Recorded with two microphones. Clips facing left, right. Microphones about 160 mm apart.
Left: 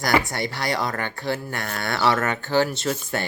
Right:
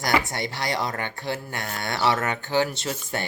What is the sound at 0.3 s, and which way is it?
Speech, 20° right (ahead or behind).